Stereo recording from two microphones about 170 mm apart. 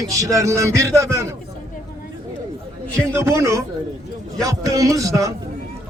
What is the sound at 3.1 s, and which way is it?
A man's voice, 15° right (ahead or behind).